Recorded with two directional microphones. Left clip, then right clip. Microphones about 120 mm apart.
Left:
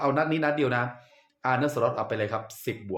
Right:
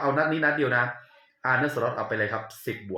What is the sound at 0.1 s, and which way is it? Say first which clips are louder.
Speech: right 2 dB; 20° left (ahead or behind).